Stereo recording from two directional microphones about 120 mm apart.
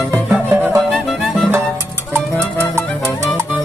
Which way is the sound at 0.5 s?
20° right (ahead or behind).